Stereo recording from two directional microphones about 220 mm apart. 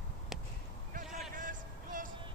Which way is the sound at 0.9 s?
40° right (ahead or behind).